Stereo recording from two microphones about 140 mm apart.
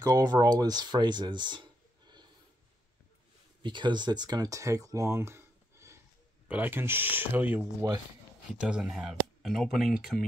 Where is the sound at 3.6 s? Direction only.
35° right (ahead or behind).